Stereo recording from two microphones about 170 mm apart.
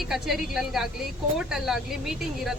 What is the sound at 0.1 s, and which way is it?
Speech, centre (ahead or behind).